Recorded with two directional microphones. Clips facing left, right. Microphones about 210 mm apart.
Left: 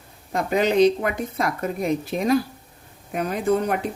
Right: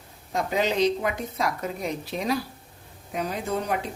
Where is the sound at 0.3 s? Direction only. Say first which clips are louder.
Left 5 dB; 55° left (ahead or behind).